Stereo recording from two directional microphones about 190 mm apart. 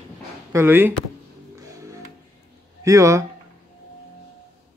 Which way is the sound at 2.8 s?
15° right (ahead or behind).